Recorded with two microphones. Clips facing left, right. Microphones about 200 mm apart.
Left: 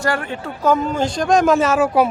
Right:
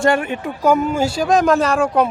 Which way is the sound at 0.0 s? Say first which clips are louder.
Right 5 dB; 20° right (ahead or behind).